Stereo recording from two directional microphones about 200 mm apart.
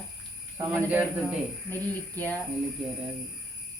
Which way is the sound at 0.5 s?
10° right (ahead or behind).